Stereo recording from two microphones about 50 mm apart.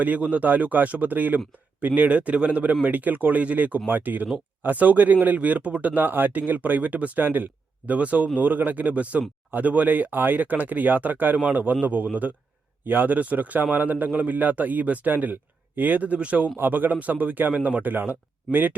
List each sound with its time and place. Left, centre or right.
0.0 s a man's voice: right
7.9 s a man's voice: right
16.6 s a man's voice: right
17.9 s a man's voice: right